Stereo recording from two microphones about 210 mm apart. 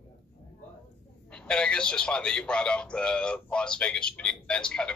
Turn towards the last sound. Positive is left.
turn(degrees=5)  # may be behind; listen again after turning